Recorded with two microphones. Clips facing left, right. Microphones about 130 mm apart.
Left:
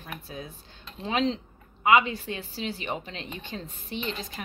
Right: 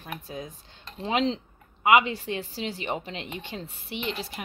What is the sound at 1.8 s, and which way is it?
A woman's voice, 20° right (ahead or behind).